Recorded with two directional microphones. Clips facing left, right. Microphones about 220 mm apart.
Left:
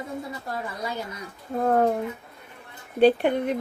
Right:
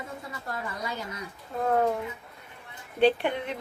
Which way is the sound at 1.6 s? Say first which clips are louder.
Left 4 dB; 40° left (ahead or behind).